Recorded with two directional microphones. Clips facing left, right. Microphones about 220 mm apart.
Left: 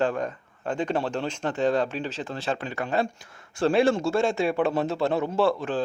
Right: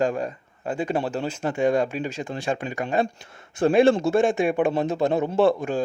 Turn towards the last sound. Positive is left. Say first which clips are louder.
# right 3 dB
turn(degrees=-15)  # may be behind; listen again after turning